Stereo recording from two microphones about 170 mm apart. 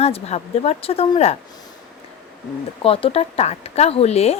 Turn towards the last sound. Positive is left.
turn(degrees=35)  # may be behind; listen again after turning